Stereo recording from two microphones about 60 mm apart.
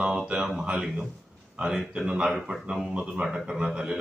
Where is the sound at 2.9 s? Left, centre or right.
Centre.